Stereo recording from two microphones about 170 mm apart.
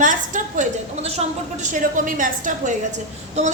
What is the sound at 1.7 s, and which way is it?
A woman's voice, 50° right (ahead or behind).